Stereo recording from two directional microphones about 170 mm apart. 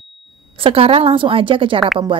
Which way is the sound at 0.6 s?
35° right (ahead or behind).